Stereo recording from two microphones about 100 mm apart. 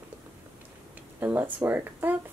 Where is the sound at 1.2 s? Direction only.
20° right (ahead or behind).